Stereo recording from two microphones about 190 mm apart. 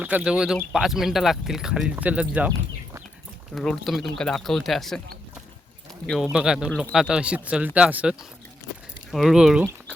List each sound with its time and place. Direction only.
0.0 s speech: 5° right (ahead or behind)
3.5 s speech: centre (ahead or behind)
6.3 s speech: 5° right (ahead or behind)
9.1 s speech: centre (ahead or behind)